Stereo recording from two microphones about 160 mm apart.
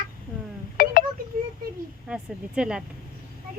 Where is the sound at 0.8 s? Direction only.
65° left (ahead or behind).